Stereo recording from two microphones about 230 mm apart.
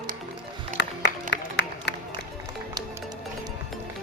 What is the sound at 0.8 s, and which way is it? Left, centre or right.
Music, left.